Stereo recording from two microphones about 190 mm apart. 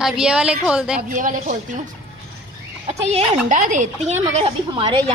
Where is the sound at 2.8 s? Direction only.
35° right (ahead or behind).